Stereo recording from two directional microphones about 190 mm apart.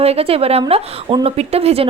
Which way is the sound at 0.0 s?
30° right (ahead or behind).